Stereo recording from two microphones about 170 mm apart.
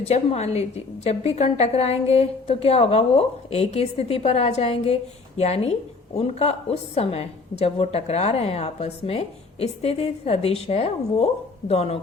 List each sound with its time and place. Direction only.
0.0 s a woman's voice: 40° left (ahead or behind)